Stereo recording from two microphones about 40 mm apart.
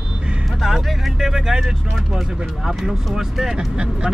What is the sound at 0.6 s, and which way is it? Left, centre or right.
Speech, centre.